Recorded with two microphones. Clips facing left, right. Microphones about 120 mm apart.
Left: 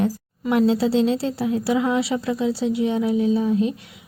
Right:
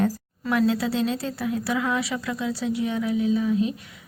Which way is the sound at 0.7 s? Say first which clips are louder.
Left 5 dB; 30° left (ahead or behind).